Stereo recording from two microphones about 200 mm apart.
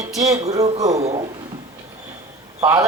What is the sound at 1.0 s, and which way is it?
Speech, 30° right (ahead or behind).